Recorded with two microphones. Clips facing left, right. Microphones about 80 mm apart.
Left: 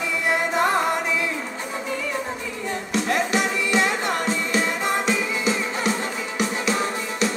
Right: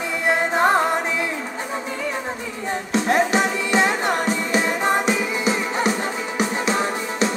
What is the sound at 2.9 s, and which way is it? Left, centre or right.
Music, right.